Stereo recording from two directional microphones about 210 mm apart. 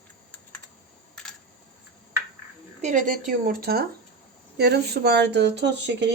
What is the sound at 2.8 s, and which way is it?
Speech, 35° right (ahead or behind).